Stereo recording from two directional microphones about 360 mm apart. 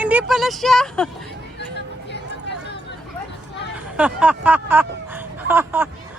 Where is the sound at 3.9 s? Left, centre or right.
Centre.